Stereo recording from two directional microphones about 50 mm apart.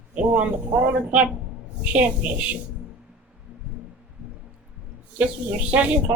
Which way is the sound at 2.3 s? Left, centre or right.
Right.